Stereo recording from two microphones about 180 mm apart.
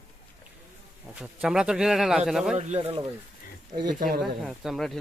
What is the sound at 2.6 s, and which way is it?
Speech, 35° right (ahead or behind).